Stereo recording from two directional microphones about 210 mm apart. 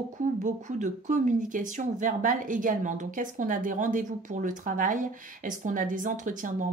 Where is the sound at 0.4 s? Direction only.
35° right (ahead or behind).